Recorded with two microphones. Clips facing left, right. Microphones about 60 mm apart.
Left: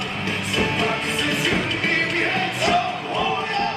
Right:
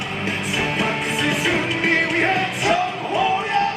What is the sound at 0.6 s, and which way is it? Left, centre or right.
Music, centre.